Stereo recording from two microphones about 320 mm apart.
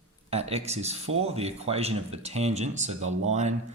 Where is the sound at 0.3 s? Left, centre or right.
Centre.